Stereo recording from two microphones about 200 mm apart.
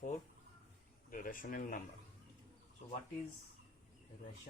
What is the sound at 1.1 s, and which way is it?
Speech, 45° left (ahead or behind).